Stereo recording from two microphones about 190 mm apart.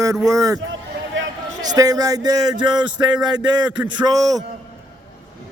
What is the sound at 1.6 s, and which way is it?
Speech, 20° right (ahead or behind).